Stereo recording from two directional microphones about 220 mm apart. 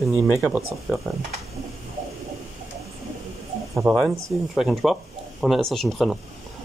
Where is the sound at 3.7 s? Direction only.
Centre (ahead or behind).